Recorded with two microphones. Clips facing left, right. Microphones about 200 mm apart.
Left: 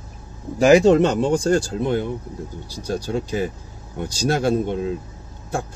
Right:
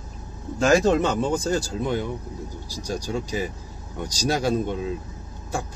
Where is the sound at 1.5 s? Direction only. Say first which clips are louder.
Left 5 dB; 50° left (ahead or behind).